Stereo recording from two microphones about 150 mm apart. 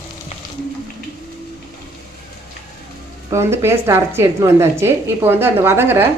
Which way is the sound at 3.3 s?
20° right (ahead or behind).